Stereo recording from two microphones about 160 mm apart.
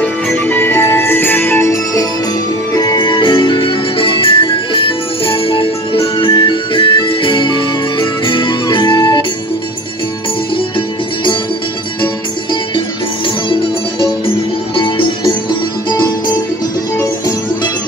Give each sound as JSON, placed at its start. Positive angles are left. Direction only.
{"t": 0.0, "sound": "music", "side_deg": 10}
{"t": 13.5, "sound": "music", "side_deg": 30}